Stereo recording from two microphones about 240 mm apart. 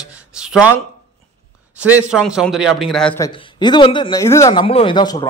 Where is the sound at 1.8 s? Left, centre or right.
Centre.